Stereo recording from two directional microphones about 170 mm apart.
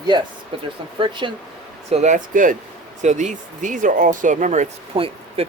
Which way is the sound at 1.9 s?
45° right (ahead or behind).